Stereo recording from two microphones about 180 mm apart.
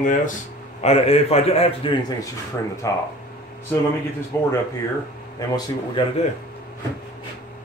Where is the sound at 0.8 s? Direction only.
35° left (ahead or behind).